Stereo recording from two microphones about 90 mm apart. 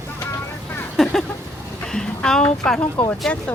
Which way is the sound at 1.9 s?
5° left (ahead or behind).